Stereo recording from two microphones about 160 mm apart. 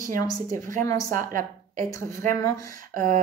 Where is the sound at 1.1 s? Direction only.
55° right (ahead or behind).